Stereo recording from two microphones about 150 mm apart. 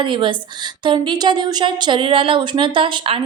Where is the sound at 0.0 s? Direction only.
35° right (ahead or behind).